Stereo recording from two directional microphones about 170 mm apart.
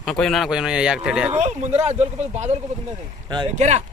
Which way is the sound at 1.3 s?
40° right (ahead or behind).